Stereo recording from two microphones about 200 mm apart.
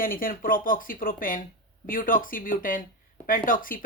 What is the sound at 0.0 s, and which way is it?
Speech, 45° left (ahead or behind).